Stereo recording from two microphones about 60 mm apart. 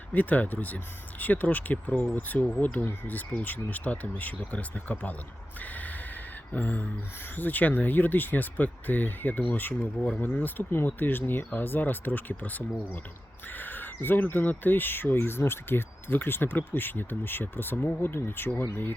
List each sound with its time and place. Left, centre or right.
0.1 s speech: left
5.5 s snort: left
6.5 s speech: left